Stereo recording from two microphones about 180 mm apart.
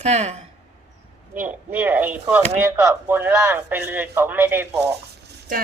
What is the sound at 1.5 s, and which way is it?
Speech, 10° right (ahead or behind).